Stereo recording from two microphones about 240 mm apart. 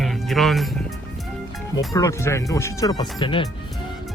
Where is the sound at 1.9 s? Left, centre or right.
Centre.